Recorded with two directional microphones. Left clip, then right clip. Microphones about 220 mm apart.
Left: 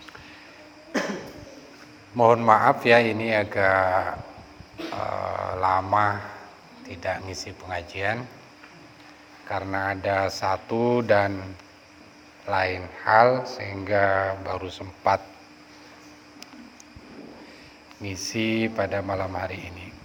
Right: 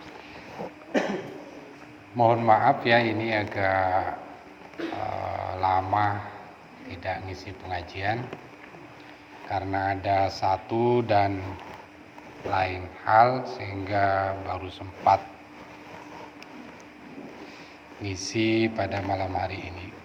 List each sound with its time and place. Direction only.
2.1 s speech: 50° left (ahead or behind)
4.9 s a sound: 45° left (ahead or behind)
7.0 s speech: 50° left (ahead or behind)
9.5 s speech: 40° left (ahead or behind)
12.5 s speech: 45° left (ahead or behind)
18.0 s speech: 40° left (ahead or behind)